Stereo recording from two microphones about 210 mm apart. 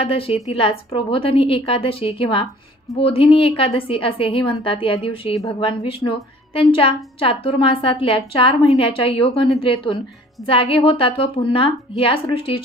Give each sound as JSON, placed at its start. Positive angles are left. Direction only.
{"t": 0.0, "sound": "a woman's voice", "side_deg": 25}